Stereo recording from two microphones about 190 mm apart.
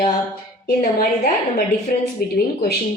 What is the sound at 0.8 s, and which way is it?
A woman's voice, 45° left (ahead or behind).